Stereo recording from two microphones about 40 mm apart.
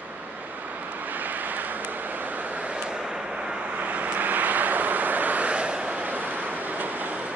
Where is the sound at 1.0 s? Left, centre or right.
Right.